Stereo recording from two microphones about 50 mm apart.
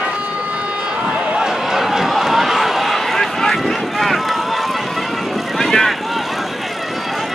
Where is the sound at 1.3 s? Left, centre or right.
Centre.